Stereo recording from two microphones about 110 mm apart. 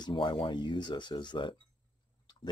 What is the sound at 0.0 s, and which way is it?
Speech, 45° left (ahead or behind).